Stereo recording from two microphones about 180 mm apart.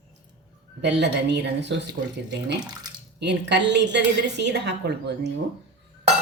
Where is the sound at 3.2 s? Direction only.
70° right (ahead or behind).